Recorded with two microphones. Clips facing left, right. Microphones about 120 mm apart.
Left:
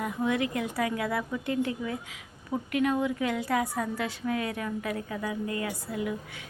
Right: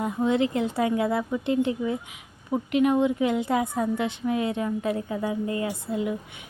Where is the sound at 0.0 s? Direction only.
25° right (ahead or behind).